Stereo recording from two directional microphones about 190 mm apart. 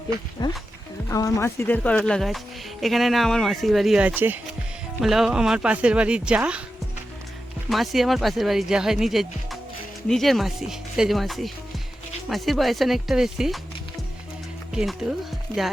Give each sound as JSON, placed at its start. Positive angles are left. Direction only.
{"t": 0.4, "sound": "speech", "side_deg": 20}
{"t": 7.7, "sound": "speech", "side_deg": 0}
{"t": 14.7, "sound": "speech", "side_deg": -5}